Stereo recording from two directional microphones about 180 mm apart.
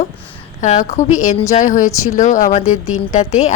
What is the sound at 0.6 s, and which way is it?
A woman's voice, 40° left (ahead or behind).